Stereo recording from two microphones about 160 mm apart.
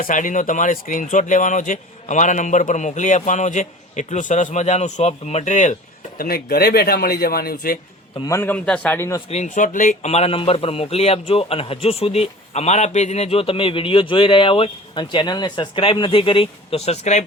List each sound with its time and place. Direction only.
0.0 s speech: 55° left (ahead or behind)
6.1 s speech: 70° left (ahead or behind)
8.2 s a man's voice: 15° left (ahead or behind)
9.3 s speech: 50° left (ahead or behind)